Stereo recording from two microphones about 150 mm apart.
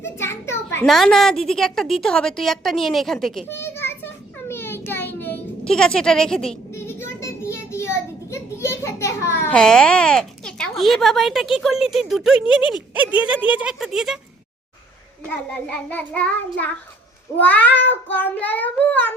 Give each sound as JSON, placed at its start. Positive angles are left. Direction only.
{"t": 0.0, "sound": "a child's voice", "side_deg": 15}
{"t": 0.9, "sound": "a woman's voice", "side_deg": 0}
{"t": 3.5, "sound": "children playing", "side_deg": 15}
{"t": 4.9, "sound": "a child's voice", "side_deg": 15}
{"t": 6.7, "sound": "child singing", "side_deg": 15}
{"t": 12.7, "sound": "speech", "side_deg": -10}
{"t": 15.2, "sound": "child singing", "side_deg": 10}
{"t": 17.4, "sound": "child singing", "side_deg": 10}